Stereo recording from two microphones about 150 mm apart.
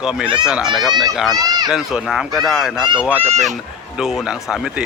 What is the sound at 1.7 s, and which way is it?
A man's voice, 5° right (ahead or behind).